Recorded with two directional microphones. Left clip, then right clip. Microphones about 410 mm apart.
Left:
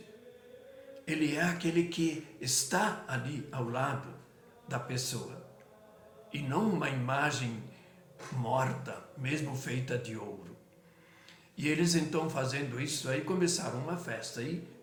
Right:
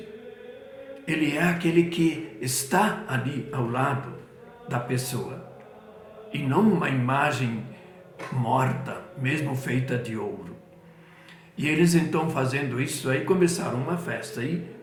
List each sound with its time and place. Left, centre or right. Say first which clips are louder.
1.0 s speech: right 7 dB; left
6.3 s speech: right 9 dB; left
8.4 s speech: right 7 dB; left
11.5 s speech: right 8 dB; left